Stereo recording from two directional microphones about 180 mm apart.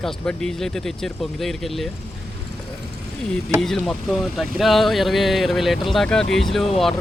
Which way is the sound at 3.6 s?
Centre (ahead or behind).